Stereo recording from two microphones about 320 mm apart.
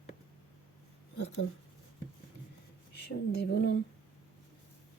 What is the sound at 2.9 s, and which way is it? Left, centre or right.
Speech, left.